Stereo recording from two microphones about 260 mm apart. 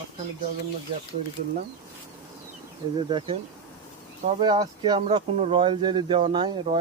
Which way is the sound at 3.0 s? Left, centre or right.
Centre.